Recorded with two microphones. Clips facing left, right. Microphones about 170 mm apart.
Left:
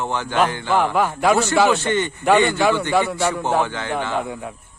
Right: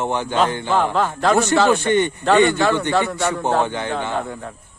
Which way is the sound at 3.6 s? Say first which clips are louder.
Right 1 dB; 20° right (ahead or behind).